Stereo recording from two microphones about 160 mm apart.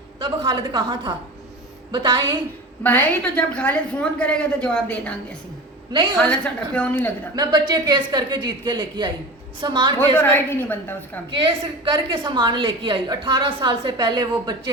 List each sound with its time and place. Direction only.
0.2 s a woman's voice: 30° right (ahead or behind)
2.8 s a woman's voice: 10° left (ahead or behind)
6.2 s a woman's voice: 5° left (ahead or behind)
7.3 s a woman's voice: 25° right (ahead or behind)
10.0 s a woman's voice: 10° left (ahead or behind)
11.4 s a woman's voice: 30° right (ahead or behind)